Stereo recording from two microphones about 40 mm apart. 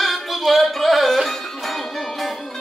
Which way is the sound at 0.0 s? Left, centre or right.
Centre.